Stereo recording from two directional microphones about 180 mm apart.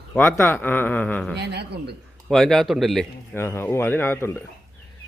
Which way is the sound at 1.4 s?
70° right (ahead or behind).